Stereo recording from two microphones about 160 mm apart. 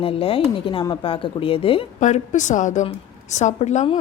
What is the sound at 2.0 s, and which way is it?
A woman's voice, 50° left (ahead or behind).